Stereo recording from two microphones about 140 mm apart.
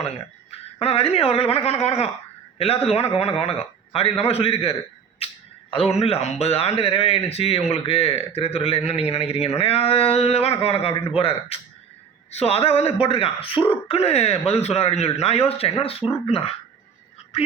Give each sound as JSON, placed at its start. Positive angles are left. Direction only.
{"t": 0.8, "sound": "a man's voice", "side_deg": 45}